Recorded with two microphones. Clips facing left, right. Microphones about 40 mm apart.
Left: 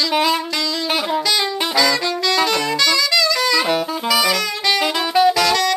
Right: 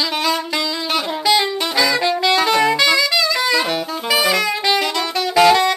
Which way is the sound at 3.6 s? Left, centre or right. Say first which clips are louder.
Left 2 dB; centre.